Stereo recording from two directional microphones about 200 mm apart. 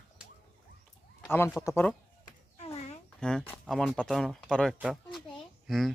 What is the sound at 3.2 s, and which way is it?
A woman's voice, 5° left (ahead or behind).